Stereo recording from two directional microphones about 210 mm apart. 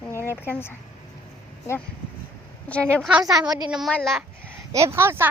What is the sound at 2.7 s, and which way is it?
A woman's voice, 5° left (ahead or behind).